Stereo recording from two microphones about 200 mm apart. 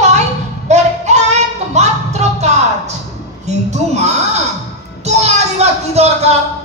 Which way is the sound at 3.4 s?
35° right (ahead or behind).